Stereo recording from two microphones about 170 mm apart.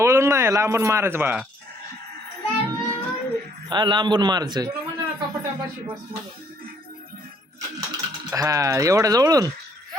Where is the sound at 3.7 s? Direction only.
25° right (ahead or behind).